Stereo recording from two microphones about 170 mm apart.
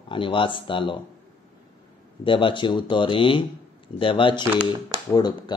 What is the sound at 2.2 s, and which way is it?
Speech, 30° left (ahead or behind).